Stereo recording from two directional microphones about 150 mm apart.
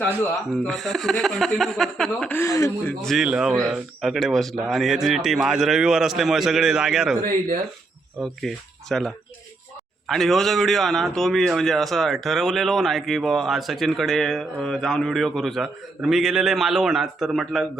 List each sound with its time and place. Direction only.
0.5 s a man's voice: 5° left (ahead or behind)
2.3 s speech: 20° left (ahead or behind)
3.0 s a man's voice: centre (ahead or behind)
8.2 s a man's voice: centre (ahead or behind)